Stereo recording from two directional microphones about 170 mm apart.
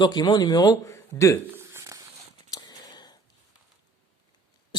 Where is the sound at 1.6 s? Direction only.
15° right (ahead or behind).